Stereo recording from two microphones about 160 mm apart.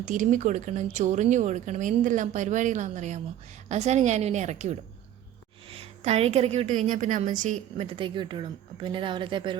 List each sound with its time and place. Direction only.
0.0 s speech: 55° right (ahead or behind)
7.9 s speech: 30° right (ahead or behind)